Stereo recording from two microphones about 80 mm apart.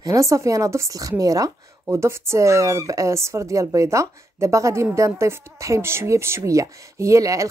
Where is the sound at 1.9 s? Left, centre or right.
Right.